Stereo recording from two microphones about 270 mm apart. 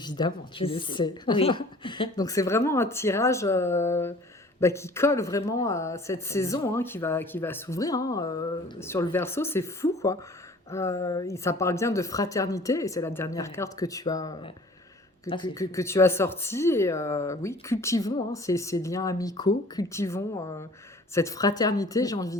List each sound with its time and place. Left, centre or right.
0.0 s speech: centre